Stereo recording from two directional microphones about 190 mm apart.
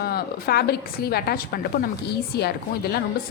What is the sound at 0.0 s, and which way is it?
A woman's voice, 55° left (ahead or behind).